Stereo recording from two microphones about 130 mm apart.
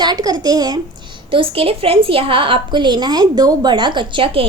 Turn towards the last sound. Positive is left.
turn(degrees=-45)  # may be behind; listen again after turning